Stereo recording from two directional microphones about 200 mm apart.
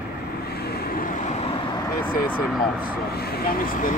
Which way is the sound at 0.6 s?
50° left (ahead or behind).